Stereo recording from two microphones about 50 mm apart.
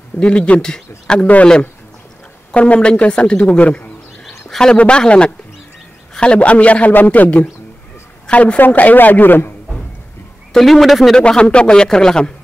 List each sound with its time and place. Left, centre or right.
0.2 s a woman's voice: left
1.2 s a woman's voice: left
2.5 s a woman's voice: left
4.5 s a woman's voice: centre
8.5 s a man's voice: left
10.5 s speech: centre
11.1 s a man's voice: centre